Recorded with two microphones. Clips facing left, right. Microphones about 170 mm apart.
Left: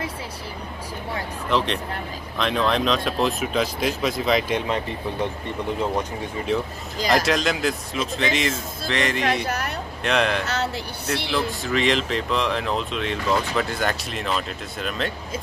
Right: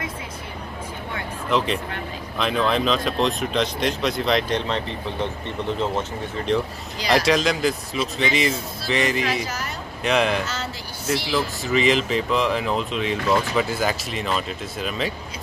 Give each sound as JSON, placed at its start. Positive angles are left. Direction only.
{"t": 2.3, "sound": "speech", "side_deg": 0}
{"t": 9.5, "sound": "speech", "side_deg": 60}
{"t": 10.0, "sound": "speech", "side_deg": 0}
{"t": 10.4, "sound": "speech", "side_deg": 65}
{"t": 11.2, "sound": "speech", "side_deg": 0}